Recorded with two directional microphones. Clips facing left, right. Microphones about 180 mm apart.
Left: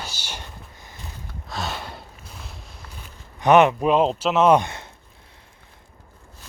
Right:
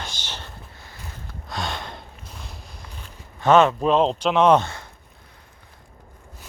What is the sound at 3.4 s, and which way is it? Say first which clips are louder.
Speech: left 1 dB; 15° left (ahead or behind).